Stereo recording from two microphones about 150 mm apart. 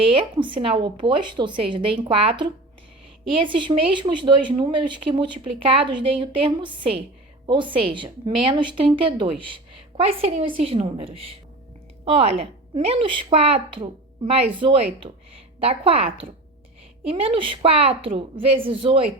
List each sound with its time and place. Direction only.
0.0 s speech: 35° right (ahead or behind)